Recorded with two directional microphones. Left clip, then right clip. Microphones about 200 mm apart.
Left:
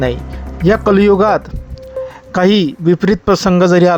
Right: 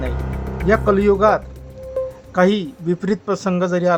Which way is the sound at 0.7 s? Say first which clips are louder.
Left 5 dB; 35° left (ahead or behind).